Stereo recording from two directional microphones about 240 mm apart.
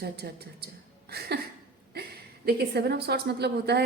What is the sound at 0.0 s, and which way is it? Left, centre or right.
A woman's voice, right.